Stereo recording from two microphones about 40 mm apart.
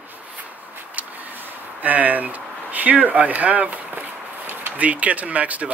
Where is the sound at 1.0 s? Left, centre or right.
Right.